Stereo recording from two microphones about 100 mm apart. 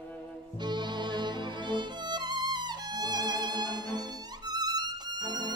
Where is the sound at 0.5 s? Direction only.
45° right (ahead or behind).